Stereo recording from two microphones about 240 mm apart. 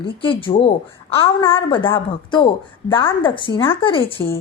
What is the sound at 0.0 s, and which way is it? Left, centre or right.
A woman's voice, left.